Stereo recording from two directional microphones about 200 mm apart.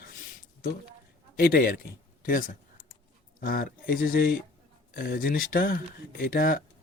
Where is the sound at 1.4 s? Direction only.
45° left (ahead or behind).